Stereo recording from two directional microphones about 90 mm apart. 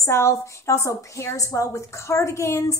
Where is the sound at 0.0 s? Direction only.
30° left (ahead or behind).